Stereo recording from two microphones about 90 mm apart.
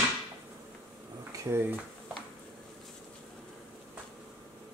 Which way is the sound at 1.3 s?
30° right (ahead or behind).